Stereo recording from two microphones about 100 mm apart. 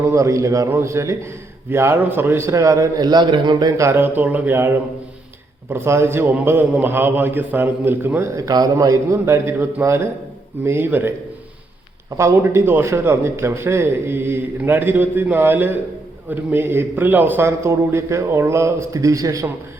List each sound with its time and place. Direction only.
0.0 s a man's voice: 30° right (ahead or behind); by 3.8 s 45° right (ahead or behind)
3.8 s a man's voice: 25° right (ahead or behind)
12.1 s a man's voice: 25° right (ahead or behind)